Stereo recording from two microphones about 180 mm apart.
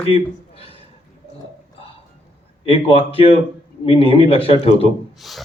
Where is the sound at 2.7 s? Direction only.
30° left (ahead or behind).